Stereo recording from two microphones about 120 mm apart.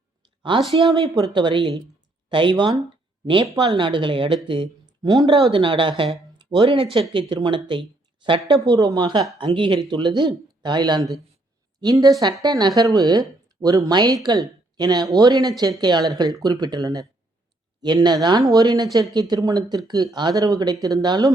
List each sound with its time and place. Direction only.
0.5 s speech: 40° right (ahead or behind)
1.1 s a woman's voice: 30° right (ahead or behind)
1.4 s speech: 40° right (ahead or behind)
6.6 s speech: 55° right (ahead or behind)
7.1 s speech: 45° right (ahead or behind)